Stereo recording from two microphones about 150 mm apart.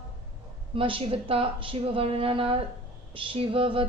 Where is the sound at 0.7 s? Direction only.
40° right (ahead or behind).